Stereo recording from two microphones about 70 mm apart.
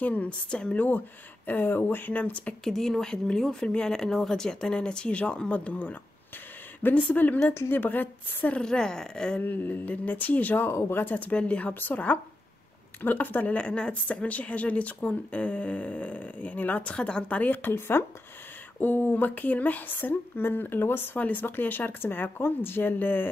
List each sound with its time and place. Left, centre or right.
0.0 s speech: left
0.8 s speech: left
2.6 s speech: centre; by 8.5 s left
8.5 s speech: centre
9.4 s speech: left